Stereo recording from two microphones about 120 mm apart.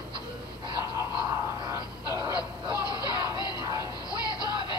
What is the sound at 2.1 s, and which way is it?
Music, 30° left (ahead or behind).